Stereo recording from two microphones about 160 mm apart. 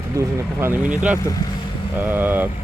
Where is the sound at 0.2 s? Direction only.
15° right (ahead or behind).